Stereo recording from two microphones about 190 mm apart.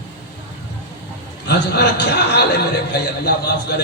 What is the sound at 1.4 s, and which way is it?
A man's voice, 65° left (ahead or behind).